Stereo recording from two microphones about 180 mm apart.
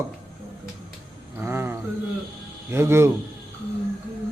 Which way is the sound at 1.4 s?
15° right (ahead or behind).